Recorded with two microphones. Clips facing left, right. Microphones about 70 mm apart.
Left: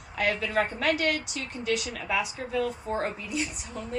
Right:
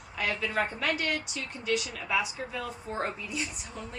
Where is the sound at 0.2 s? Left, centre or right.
Left.